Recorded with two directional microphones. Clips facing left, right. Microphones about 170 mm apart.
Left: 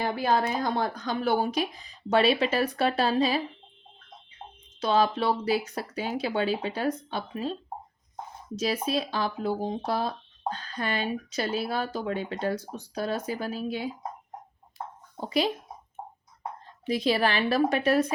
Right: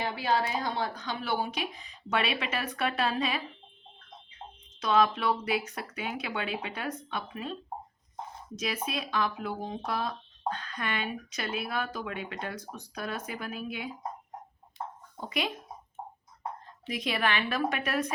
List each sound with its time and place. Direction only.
0.0 s speech: 45° left (ahead or behind)
4.8 s speech: 30° left (ahead or behind)
15.2 s speech: 30° left (ahead or behind)
16.9 s speech: 30° left (ahead or behind)